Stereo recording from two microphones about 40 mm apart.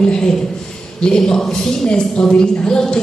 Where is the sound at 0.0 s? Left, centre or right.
Centre.